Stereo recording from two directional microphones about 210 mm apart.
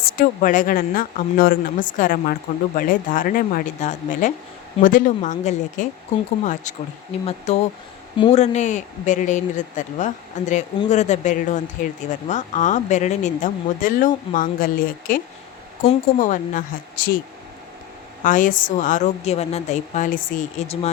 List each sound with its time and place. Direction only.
0.2 s speech: 40° left (ahead or behind)
18.2 s speech: 40° left (ahead or behind)